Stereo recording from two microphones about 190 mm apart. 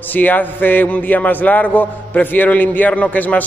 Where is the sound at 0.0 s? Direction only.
10° left (ahead or behind).